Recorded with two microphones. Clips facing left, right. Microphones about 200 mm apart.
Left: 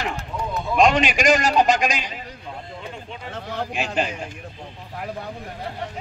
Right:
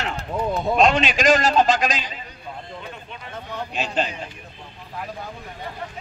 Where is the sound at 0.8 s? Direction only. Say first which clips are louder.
Left 1 dB; 15° left (ahead or behind).